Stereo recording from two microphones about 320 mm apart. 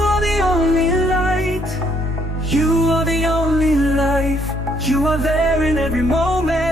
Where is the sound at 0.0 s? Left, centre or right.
Centre.